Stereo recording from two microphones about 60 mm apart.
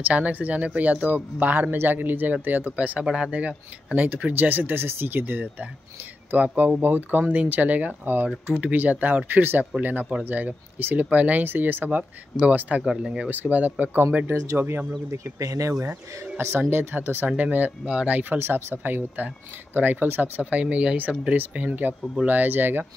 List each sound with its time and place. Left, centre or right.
0.0 s speech: right
13.3 s speech: right
14.3 s speech: right
14.6 s speech: right
15.0 s speech: right
15.4 s speech: right
16.3 s speech: right
18.4 s speech: right